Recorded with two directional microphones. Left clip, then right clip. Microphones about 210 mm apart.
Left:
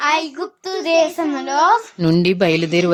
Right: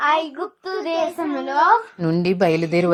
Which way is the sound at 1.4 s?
90° left.